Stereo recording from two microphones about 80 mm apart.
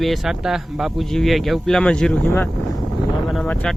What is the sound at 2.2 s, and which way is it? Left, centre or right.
Speech, left.